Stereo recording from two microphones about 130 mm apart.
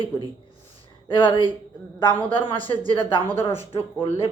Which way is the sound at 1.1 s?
40° left (ahead or behind).